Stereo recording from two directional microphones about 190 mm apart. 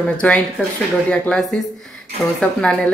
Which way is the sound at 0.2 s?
5° left (ahead or behind).